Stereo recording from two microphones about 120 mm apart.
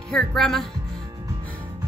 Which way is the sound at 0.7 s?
35° right (ahead or behind).